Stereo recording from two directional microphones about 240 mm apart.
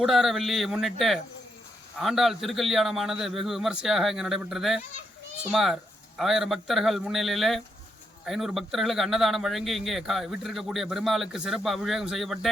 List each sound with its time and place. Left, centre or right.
0.0 s a man's voice: centre